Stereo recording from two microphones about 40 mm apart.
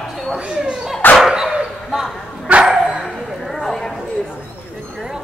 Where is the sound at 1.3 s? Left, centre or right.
Right.